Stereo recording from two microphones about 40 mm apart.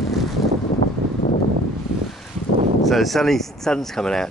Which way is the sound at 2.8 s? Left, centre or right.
Centre.